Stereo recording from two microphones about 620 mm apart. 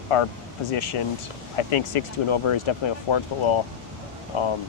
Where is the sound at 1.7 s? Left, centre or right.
Left.